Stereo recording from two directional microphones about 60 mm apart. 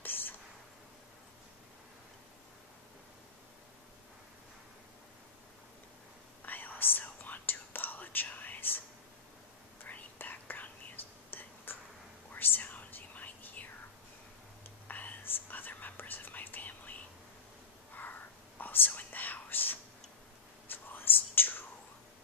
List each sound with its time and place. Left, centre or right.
0.0 s a sound: left
6.4 s whispering: left
9.8 s whispering: left
14.9 s whispering: left
17.9 s whispering: left